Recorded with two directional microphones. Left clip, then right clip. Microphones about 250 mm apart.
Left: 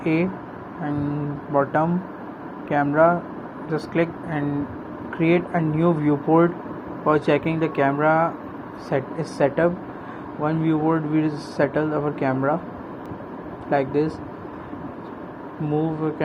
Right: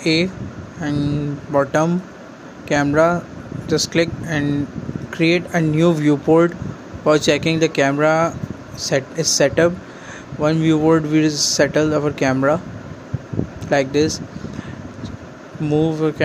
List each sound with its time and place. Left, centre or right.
0.0 s speech: right
1.5 s speech: right
13.7 s speech: right
15.7 s speech: right